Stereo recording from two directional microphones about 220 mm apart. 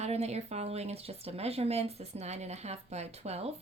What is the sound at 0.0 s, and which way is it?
Speech, 30° right (ahead or behind).